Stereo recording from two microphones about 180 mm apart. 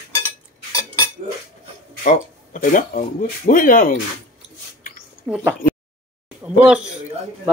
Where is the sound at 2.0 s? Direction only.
45° left (ahead or behind).